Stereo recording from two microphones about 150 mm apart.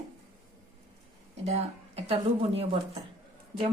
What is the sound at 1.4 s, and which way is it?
A woman's voice, 45° right (ahead or behind).